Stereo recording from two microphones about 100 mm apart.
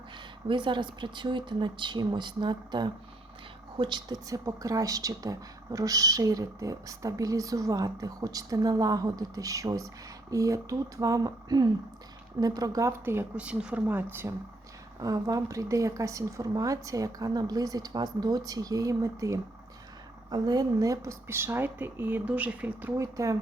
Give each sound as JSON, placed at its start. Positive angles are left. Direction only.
{"t": 0.4, "sound": "speech", "side_deg": -55}
{"t": 4.3, "sound": "speech", "side_deg": -35}
{"t": 13.3, "sound": "speech", "side_deg": -10}
{"t": 13.8, "sound": "speech", "side_deg": -20}
{"t": 15.0, "sound": "speech", "side_deg": -35}
{"t": 23.0, "sound": "speech", "side_deg": -35}